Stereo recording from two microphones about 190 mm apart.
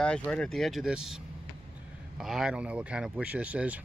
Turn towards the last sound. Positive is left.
turn(degrees=-5)  # may be behind; listen again after turning